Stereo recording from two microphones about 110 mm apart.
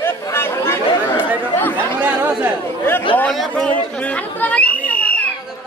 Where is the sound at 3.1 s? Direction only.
10° left (ahead or behind).